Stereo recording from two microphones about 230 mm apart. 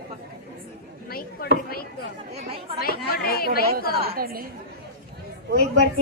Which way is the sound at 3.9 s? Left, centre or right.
Right.